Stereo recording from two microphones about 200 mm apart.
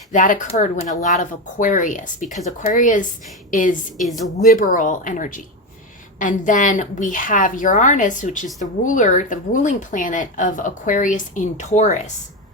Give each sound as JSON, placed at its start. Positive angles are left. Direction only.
{"t": 0.1, "sound": "speech", "side_deg": 40}